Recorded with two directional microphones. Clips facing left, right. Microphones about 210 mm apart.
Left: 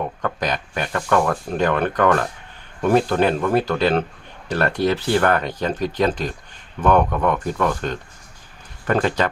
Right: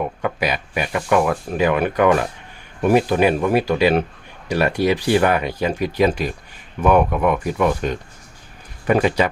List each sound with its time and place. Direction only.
0.0 s speech: 10° right (ahead or behind)